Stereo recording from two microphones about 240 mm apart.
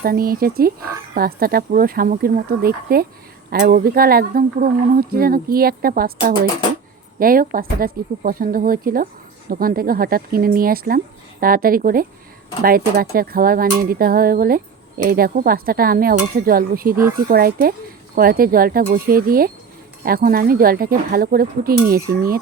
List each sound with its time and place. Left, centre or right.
0.0 s speech: right